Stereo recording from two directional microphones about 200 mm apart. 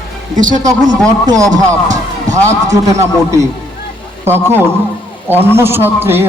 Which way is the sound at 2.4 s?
15° right (ahead or behind).